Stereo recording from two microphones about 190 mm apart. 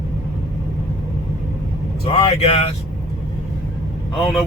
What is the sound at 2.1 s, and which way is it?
Speech, 35° left (ahead or behind).